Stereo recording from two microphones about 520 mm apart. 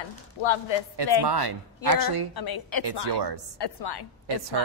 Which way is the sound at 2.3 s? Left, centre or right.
Left.